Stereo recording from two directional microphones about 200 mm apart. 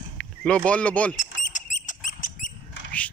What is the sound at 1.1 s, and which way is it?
Rodents, 40° left (ahead or behind).